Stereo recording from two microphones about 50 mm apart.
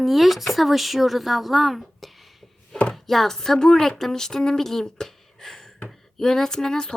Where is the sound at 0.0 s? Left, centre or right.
Centre.